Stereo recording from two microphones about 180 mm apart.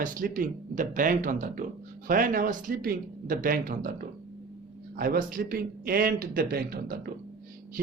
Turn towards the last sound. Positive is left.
turn(degrees=-55)  # may be behind; listen again after turning